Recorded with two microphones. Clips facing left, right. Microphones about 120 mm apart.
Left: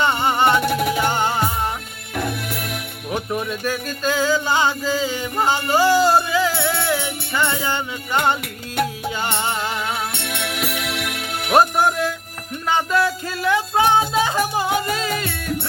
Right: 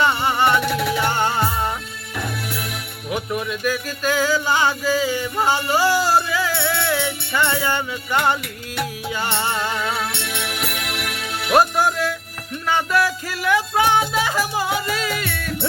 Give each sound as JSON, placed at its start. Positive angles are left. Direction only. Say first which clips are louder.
{"t": 0.0, "sound": "music", "louder": "even", "side_deg": 25}
{"t": 0.6, "sound": "music", "louder": "left 2 dB", "side_deg": 45}
{"t": 0.9, "sound": "music", "louder": "even", "side_deg": 15}
{"t": 2.1, "sound": "music", "louder": "left 3 dB", "side_deg": 55}
{"t": 3.3, "sound": "music", "louder": "right 2 dB", "side_deg": 30}
{"t": 10.1, "sound": "music", "louder": "left 1 dB", "side_deg": 55}
{"t": 11.5, "sound": "music", "louder": "left 1 dB", "side_deg": 25}